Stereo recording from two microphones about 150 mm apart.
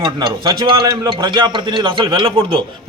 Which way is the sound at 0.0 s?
30° right (ahead or behind).